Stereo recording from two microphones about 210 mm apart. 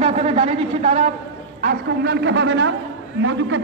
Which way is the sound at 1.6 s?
45° right (ahead or behind).